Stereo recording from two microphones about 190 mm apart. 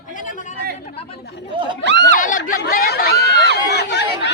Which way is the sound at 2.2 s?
45° left (ahead or behind).